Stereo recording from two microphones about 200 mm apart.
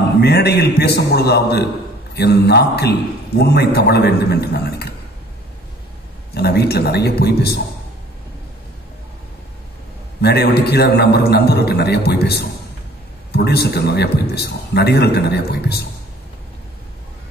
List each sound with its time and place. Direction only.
0.2 s a man's voice: 55° left (ahead or behind)
6.3 s a man's voice: 55° left (ahead or behind)
10.2 s a man's voice: 55° left (ahead or behind)